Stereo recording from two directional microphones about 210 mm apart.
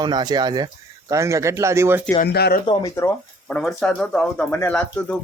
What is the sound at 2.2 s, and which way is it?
Speech, 50° left (ahead or behind).